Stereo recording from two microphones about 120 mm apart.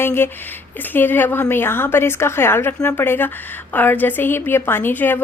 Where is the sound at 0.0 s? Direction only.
20° left (ahead or behind).